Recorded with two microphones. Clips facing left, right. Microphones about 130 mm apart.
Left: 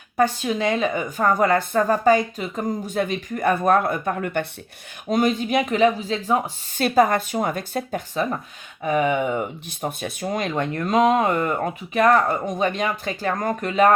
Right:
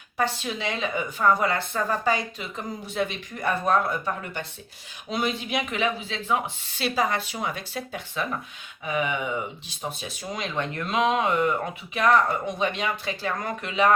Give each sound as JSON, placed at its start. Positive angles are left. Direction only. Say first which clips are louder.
{"t": 0.2, "sound": "speech", "louder": "left 7 dB", "side_deg": 45}
{"t": 5.0, "sound": "speech", "louder": "left 8 dB", "side_deg": 45}